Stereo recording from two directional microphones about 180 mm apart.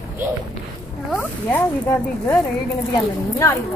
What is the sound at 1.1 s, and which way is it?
Speech, 10° left (ahead or behind).